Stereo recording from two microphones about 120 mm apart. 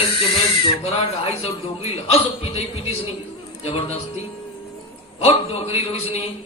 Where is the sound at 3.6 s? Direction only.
60° left (ahead or behind).